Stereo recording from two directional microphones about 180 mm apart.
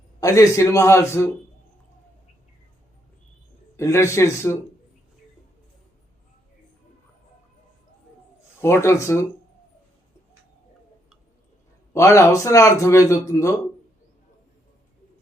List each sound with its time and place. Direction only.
0.2 s a man's voice: 20° left (ahead or behind)
3.8 s a man's voice: 15° left (ahead or behind)
8.6 s a man's voice: 15° left (ahead or behind)
11.9 s a man's voice: 15° left (ahead or behind)